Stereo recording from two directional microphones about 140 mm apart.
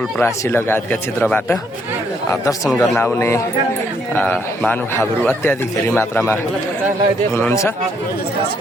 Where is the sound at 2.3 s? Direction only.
25° left (ahead or behind).